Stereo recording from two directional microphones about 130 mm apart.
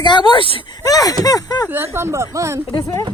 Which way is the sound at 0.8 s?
25° left (ahead or behind).